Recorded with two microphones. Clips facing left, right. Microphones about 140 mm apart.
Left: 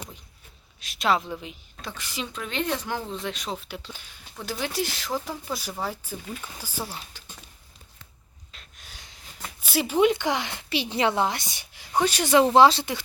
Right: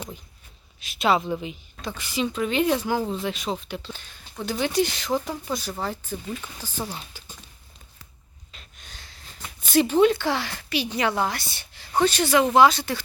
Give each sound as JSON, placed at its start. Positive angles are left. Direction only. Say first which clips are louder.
{"t": 0.8, "sound": "speech", "louder": "right 2 dB", "side_deg": 0}
{"t": 3.8, "sound": "speech", "louder": "right 4 dB", "side_deg": 10}
{"t": 4.4, "sound": "speech", "louder": "right 6 dB", "side_deg": 0}
{"t": 8.5, "sound": "a sound", "louder": "right 1 dB", "side_deg": 5}
{"t": 9.0, "sound": "a sound", "louder": "left 1 dB", "side_deg": 15}
{"t": 10.1, "sound": "a woman's voice", "louder": "right 1 dB", "side_deg": 20}
{"t": 12.3, "sound": "a woman's voice", "louder": "left 2 dB", "side_deg": 30}